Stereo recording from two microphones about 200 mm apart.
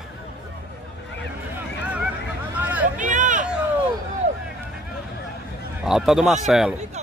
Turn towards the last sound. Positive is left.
turn(degrees=0)  # may be behind; listen again after turning